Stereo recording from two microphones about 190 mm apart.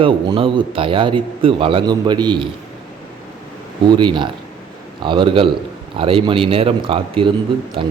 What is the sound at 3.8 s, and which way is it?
Speech, 25° right (ahead or behind).